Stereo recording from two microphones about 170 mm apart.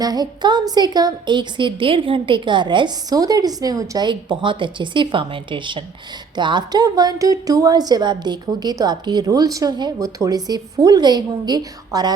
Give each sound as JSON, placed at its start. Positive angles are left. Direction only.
{"t": 0.0, "sound": "a woman's voice", "side_deg": -25}